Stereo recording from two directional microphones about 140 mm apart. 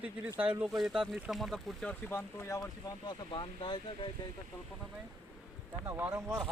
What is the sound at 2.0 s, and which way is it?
Speech, 20° left (ahead or behind).